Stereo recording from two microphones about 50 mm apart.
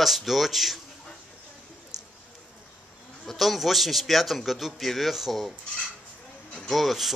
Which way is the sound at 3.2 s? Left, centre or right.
Centre.